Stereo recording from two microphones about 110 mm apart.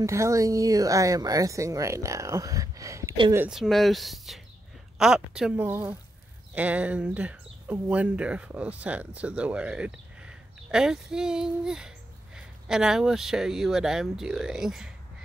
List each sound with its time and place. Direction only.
0.0 s speech: 30° right (ahead or behind)
3.4 s speech: centre (ahead or behind)
5.6 s speech: 20° right (ahead or behind); by 14.9 s 5° right (ahead or behind)